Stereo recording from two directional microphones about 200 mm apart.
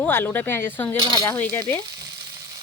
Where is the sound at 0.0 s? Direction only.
5° left (ahead or behind).